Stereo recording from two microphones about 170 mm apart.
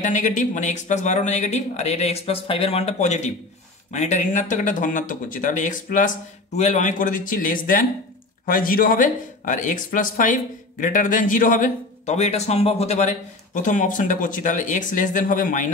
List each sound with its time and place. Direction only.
0.0 s speech: 45° left (ahead or behind)